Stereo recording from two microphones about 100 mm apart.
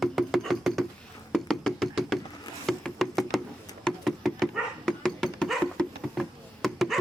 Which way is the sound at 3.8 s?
Centre (ahead or behind).